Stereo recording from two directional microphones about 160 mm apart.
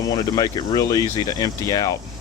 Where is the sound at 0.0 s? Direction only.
25° left (ahead or behind).